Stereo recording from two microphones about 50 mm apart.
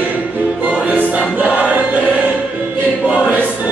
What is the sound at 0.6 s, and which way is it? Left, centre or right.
Music, right.